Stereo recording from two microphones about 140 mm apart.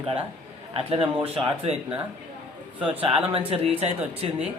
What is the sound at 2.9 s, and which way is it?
Music, 40° right (ahead or behind).